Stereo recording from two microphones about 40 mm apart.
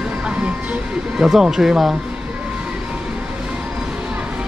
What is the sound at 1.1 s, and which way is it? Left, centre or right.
Speech, centre.